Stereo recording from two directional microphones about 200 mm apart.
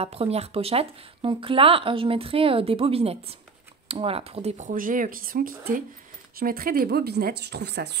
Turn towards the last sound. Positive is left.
turn(degrees=-55)  # may be behind; listen again after turning